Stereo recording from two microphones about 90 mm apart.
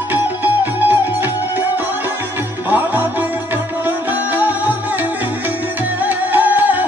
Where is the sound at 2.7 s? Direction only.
20° right (ahead or behind).